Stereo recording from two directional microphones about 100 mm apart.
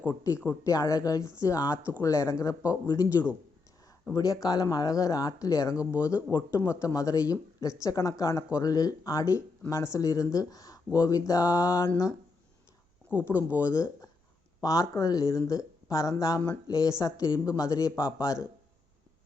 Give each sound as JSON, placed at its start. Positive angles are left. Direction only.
{"t": 0.1, "sound": "speech", "side_deg": 30}
{"t": 13.1, "sound": "speech", "side_deg": 20}